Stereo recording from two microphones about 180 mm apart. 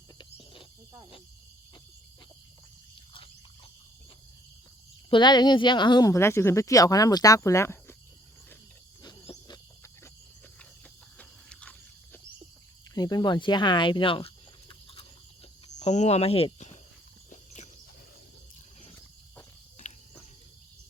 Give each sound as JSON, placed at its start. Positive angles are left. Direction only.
{"t": 0.2, "sound": "cricket", "side_deg": 30}
{"t": 5.1, "sound": "speech", "side_deg": 25}
{"t": 9.0, "sound": "cricket", "side_deg": 20}
{"t": 11.2, "sound": "a sound", "side_deg": 5}
{"t": 12.9, "sound": "speech", "side_deg": 20}
{"t": 17.2, "sound": "walk", "side_deg": 40}